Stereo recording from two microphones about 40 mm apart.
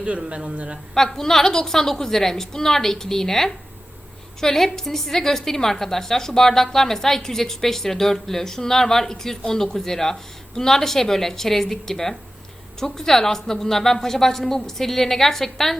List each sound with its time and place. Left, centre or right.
0.3 s a man's voice: right
0.9 s a woman's voice: centre